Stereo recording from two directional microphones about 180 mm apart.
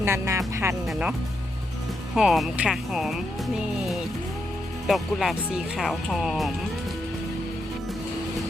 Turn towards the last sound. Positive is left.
turn(degrees=0)  # may be behind; listen again after turning